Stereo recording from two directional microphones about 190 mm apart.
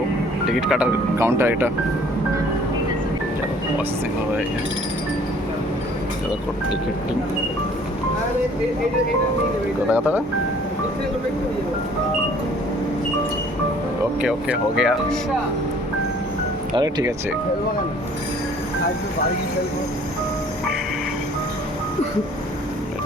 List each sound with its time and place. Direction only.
0.6 s speech: 5° right (ahead or behind)
1.2 s speech: 15° right (ahead or behind)
9.9 s speech: 10° right (ahead or behind)
14.2 s speech: 5° right (ahead or behind)
16.7 s speech: 20° right (ahead or behind)